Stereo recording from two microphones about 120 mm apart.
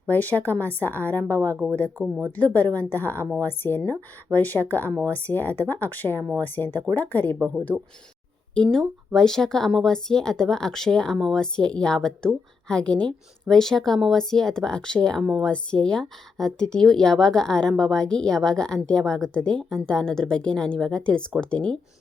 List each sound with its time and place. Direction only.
0.1 s speech: 15° left (ahead or behind)
7.7 s speech: 25° right (ahead or behind)
8.7 s a woman's voice: 5° left (ahead or behind)